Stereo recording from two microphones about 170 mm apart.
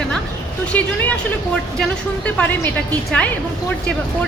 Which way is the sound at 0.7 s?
10° left (ahead or behind).